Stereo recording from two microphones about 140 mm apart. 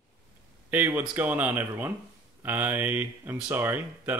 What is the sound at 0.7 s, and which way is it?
Speech, 15° right (ahead or behind).